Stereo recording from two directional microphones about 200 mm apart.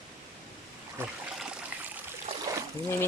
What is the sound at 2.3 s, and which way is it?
Splash, 25° right (ahead or behind).